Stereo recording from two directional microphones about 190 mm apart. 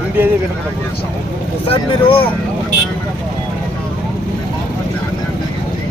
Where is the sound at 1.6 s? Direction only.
30° left (ahead or behind).